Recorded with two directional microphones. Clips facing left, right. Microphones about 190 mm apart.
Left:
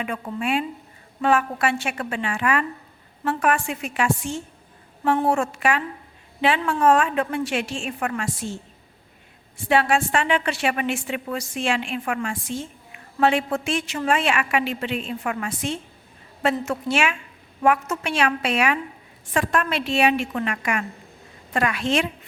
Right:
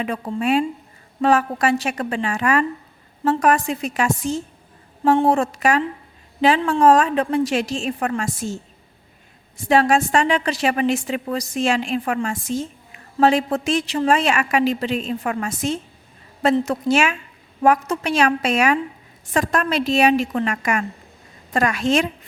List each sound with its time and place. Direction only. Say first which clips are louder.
0.0 s a woman's voice: right 4 dB; 35° right (ahead or behind)
9.6 s a woman's voice: right 4 dB; 40° right (ahead or behind)